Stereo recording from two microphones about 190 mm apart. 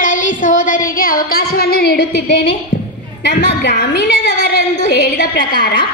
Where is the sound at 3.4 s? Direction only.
65° left (ahead or behind).